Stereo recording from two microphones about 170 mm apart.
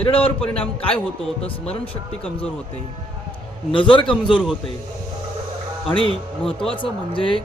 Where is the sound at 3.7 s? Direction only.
30° left (ahead or behind).